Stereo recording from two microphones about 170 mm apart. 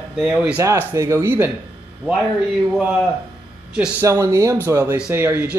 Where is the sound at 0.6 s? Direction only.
15° right (ahead or behind).